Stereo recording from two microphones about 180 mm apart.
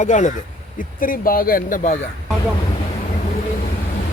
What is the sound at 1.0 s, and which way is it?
Speech, 50° left (ahead or behind).